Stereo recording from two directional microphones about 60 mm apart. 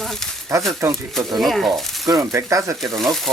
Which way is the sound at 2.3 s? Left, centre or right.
Right.